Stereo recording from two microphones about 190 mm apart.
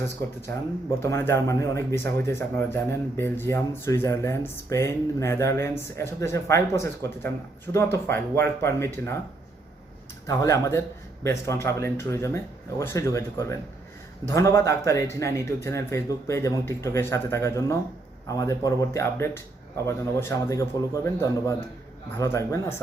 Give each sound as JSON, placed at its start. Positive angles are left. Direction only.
{"t": 0.9, "sound": "speech", "side_deg": 15}
{"t": 10.2, "sound": "speech", "side_deg": 15}